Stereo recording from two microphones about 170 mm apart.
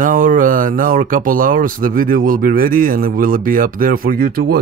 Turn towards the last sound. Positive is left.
turn(degrees=-60)  # may be behind; listen again after turning